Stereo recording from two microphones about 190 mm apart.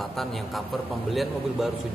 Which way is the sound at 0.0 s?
Centre (ahead or behind).